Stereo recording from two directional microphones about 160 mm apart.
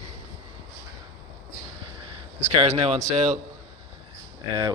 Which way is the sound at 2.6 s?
40° right (ahead or behind).